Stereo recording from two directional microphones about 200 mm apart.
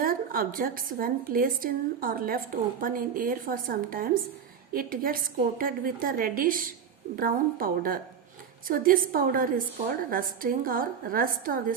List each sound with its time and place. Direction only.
0.0 s a woman's voice: 45° right (ahead or behind)